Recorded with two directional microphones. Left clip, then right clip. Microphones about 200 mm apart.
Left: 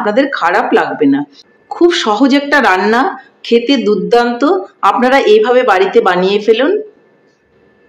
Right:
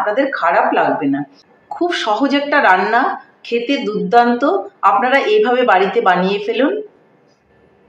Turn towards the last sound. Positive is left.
turn(degrees=50)  # may be behind; listen again after turning